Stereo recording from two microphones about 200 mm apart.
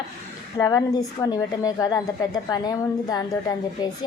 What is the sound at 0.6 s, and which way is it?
A woman's voice, 15° left (ahead or behind).